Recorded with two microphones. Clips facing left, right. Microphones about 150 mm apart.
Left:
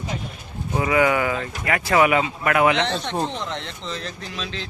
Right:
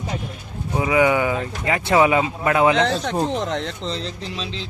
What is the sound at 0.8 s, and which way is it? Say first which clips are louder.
Speech: right 2 dB; 15° right (ahead or behind).